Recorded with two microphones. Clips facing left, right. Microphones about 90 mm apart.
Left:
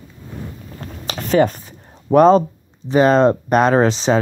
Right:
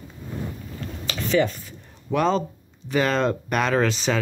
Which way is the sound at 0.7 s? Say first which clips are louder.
Left 4 dB; 45° left (ahead or behind).